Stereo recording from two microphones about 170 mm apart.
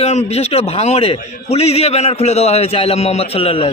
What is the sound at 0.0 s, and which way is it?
A man's voice, 40° left (ahead or behind).